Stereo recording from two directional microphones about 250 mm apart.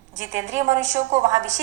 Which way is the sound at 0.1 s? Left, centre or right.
Right.